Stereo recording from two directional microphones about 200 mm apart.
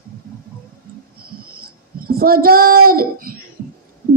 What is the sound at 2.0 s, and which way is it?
Child singing, 45° right (ahead or behind).